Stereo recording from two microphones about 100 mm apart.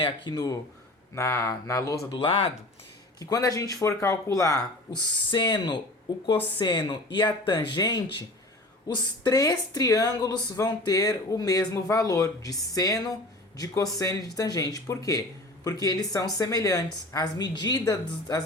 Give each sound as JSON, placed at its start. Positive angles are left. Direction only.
{"t": 0.0, "sound": "speech", "side_deg": 40}
{"t": 2.1, "sound": "speech", "side_deg": 60}
{"t": 3.2, "sound": "speech", "side_deg": 35}
{"t": 5.3, "sound": "speech", "side_deg": 50}
{"t": 14.0, "sound": "speech", "side_deg": 35}